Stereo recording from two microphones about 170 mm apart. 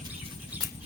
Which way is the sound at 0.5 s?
10° right (ahead or behind).